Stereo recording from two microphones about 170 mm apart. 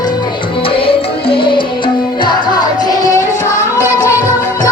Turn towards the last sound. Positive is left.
turn(degrees=-10)  # may be behind; listen again after turning